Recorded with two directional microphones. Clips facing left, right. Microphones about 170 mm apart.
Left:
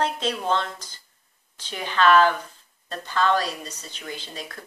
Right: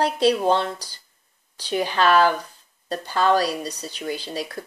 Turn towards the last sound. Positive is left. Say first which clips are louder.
# right 8 dB
turn(degrees=-35)  # may be behind; listen again after turning